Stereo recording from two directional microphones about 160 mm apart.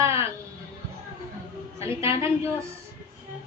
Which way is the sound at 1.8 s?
15° right (ahead or behind).